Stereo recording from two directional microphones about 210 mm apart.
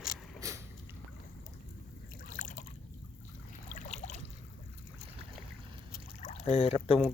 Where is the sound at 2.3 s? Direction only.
35° left (ahead or behind).